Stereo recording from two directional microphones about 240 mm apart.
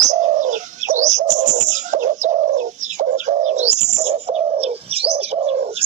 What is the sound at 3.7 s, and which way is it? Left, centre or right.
Bird, right.